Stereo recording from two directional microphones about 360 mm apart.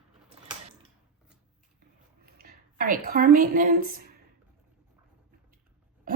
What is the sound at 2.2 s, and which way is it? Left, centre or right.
A woman's voice, right.